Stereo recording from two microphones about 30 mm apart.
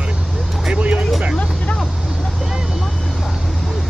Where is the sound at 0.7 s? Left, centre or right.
Right.